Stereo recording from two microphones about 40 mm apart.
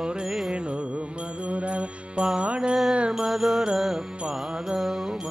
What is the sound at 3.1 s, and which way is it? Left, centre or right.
Mantra, centre.